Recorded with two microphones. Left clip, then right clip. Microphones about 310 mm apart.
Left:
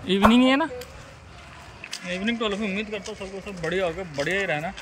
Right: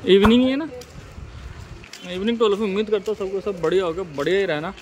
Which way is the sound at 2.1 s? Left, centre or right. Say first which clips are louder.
Right 7 dB; centre.